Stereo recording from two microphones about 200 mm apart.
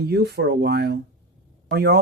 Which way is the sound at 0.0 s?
55° right (ahead or behind).